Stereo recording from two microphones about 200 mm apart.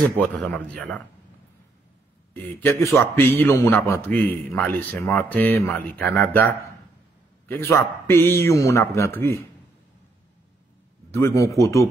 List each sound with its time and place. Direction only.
0.2 s a man's voice: 5° left (ahead or behind)
2.3 s a man's voice: 10° left (ahead or behind)
11.1 s a man's voice: 15° left (ahead or behind)